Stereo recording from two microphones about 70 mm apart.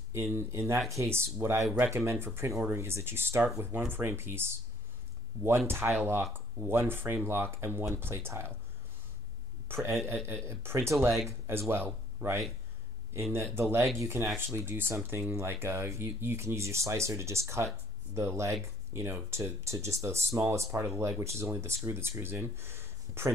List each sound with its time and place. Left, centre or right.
0.1 s speech: right
5.7 s speech: right
9.7 s speech: right